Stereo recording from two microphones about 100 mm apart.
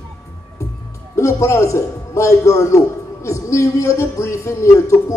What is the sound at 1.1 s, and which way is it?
A man's voice, 30° left (ahead or behind).